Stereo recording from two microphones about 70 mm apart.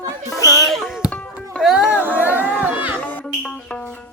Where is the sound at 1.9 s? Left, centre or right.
Right.